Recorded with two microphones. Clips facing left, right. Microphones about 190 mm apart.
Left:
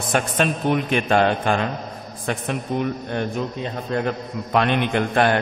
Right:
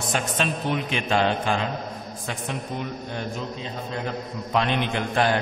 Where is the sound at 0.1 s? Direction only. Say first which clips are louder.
Left 6 dB; 55° left (ahead or behind).